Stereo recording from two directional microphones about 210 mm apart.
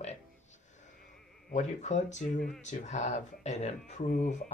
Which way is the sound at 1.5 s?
35° left (ahead or behind).